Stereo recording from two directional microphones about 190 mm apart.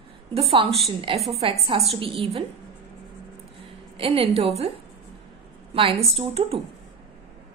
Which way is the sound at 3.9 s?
30° right (ahead or behind).